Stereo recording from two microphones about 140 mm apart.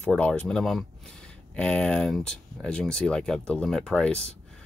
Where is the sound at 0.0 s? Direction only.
5° left (ahead or behind).